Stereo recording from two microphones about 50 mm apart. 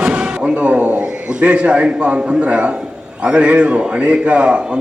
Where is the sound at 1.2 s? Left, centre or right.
Right.